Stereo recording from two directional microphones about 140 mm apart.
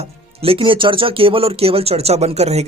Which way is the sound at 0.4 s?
40° right (ahead or behind).